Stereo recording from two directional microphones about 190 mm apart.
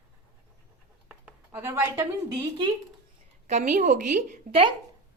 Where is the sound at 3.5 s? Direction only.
40° right (ahead or behind).